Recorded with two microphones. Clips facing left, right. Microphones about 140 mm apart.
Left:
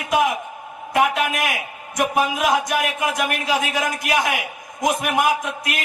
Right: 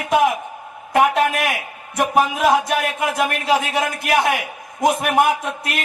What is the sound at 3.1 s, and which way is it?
A man's voice, 30° right (ahead or behind).